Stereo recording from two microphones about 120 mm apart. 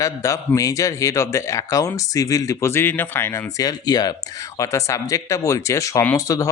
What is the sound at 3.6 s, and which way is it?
Speech, 35° left (ahead or behind).